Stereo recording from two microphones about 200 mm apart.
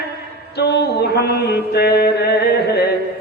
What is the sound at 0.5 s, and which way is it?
Mantra, 55° left (ahead or behind).